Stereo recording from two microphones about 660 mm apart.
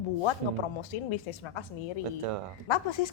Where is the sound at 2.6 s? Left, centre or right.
Left.